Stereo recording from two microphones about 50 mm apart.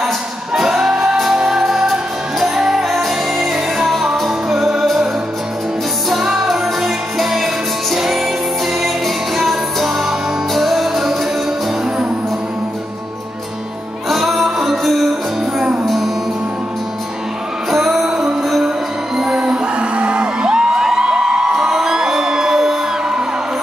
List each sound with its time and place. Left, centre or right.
0.6 s music: centre
6.0 s music: centre
14.0 s music: centre
17.6 s music: centre